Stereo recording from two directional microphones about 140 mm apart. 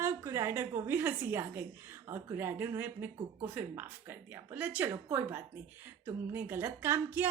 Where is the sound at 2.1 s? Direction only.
20° right (ahead or behind).